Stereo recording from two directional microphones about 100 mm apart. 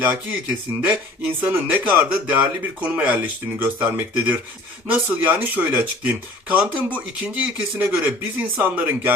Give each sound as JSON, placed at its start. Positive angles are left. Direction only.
{"t": 0.0, "sound": "speech", "side_deg": -15}